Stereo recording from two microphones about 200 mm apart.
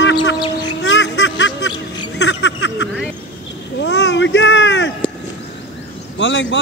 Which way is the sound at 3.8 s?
60° left (ahead or behind).